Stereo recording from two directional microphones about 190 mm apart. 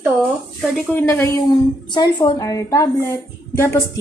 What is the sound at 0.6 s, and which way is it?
Speech, centre (ahead or behind).